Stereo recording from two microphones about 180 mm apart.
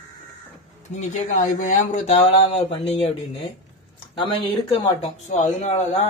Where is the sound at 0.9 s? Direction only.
40° left (ahead or behind).